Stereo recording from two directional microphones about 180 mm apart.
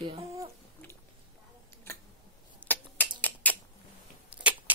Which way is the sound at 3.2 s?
10° left (ahead or behind).